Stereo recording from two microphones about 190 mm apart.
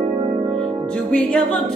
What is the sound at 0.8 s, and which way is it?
Music, 5° left (ahead or behind).